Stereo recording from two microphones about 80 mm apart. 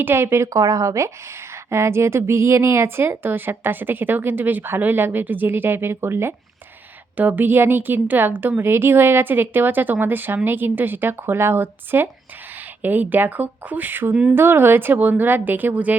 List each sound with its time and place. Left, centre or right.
0.0 s a woman's voice: right
0.6 s speech: right; by 16.0 s centre